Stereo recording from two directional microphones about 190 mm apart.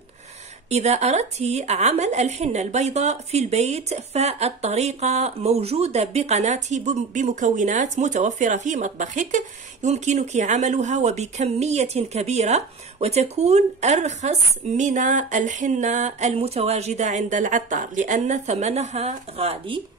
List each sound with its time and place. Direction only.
0.7 s a woman's voice: 35° right (ahead or behind)